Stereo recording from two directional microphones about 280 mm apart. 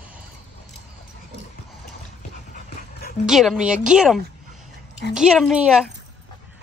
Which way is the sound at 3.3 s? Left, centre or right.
Centre.